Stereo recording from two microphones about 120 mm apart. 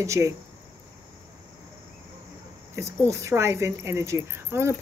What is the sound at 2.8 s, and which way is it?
Speech, 25° right (ahead or behind).